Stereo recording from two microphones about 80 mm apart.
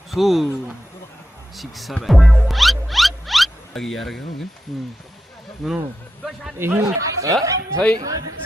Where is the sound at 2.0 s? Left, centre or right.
Centre.